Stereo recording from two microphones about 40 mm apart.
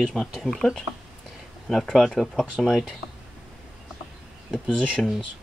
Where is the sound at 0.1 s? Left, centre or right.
Centre.